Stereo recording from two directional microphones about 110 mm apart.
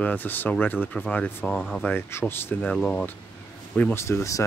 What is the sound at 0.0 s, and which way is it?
Speech, 15° left (ahead or behind).